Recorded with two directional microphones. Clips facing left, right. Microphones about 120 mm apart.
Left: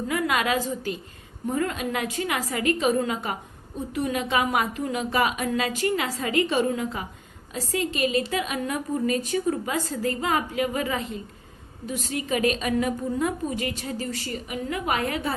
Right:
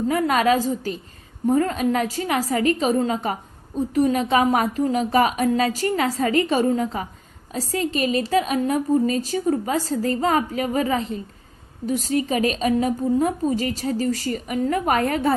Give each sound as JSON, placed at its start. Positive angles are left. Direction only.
{"t": 0.1, "sound": "a woman's voice", "side_deg": -40}